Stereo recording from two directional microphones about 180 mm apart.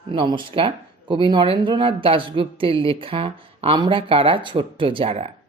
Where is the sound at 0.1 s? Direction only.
25° right (ahead or behind).